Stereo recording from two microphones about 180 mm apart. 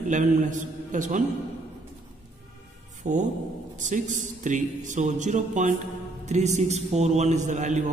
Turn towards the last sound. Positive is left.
turn(degrees=-45)  # may be behind; listen again after turning